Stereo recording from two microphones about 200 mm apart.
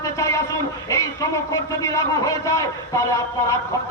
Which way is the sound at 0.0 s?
15° left (ahead or behind).